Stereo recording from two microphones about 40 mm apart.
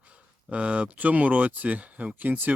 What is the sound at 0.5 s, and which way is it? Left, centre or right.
Speech, right.